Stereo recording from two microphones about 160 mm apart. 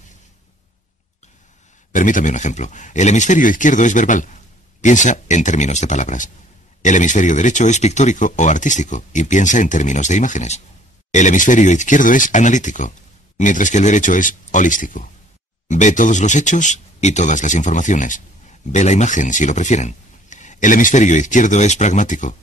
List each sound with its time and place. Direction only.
1.9 s speech: 55° left (ahead or behind)